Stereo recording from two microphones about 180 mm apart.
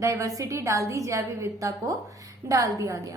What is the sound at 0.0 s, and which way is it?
A woman's voice, 15° right (ahead or behind).